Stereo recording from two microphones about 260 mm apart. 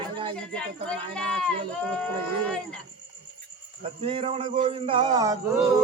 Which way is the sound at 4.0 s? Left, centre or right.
Right.